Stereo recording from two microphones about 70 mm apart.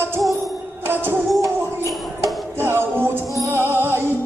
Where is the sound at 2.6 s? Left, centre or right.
Right.